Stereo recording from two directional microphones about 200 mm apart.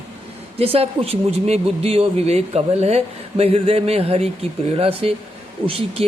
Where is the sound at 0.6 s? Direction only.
30° right (ahead or behind).